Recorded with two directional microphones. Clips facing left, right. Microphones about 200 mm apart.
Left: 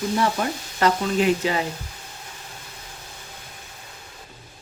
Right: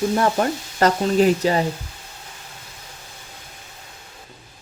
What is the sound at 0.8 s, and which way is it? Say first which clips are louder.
Speech: right 4 dB; 40° right (ahead or behind).